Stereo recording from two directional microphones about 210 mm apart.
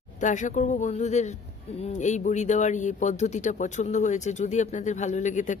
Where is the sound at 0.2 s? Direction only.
35° left (ahead or behind).